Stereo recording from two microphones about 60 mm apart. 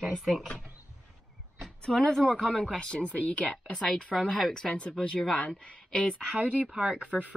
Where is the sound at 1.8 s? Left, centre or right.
Centre.